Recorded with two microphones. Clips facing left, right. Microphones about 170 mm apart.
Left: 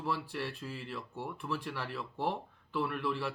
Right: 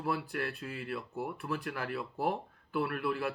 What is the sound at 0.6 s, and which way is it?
Speech, 55° right (ahead or behind).